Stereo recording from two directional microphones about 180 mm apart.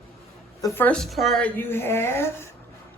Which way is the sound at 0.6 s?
10° left (ahead or behind).